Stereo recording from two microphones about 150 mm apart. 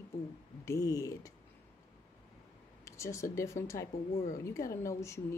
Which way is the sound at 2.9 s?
20° left (ahead or behind).